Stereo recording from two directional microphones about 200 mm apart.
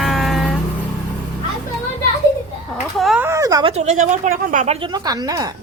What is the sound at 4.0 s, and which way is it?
Speech, 40° right (ahead or behind).